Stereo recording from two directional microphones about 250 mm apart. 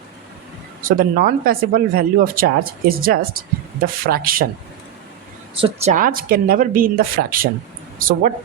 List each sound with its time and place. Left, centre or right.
0.8 s speech: right
5.5 s speech: right